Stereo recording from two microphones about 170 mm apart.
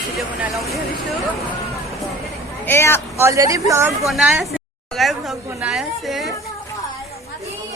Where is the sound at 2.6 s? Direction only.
15° left (ahead or behind).